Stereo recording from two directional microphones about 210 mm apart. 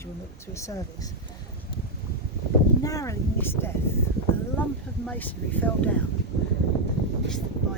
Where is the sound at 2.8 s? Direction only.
15° left (ahead or behind).